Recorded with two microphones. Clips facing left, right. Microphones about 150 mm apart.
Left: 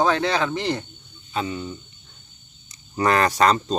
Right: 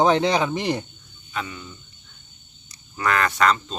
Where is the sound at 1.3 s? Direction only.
30° left (ahead or behind).